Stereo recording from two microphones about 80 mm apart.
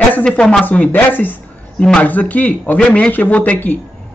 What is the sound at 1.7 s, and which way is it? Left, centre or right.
A man's voice, centre.